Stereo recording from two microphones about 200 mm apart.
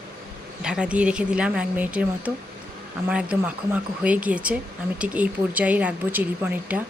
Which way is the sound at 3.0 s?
5° right (ahead or behind).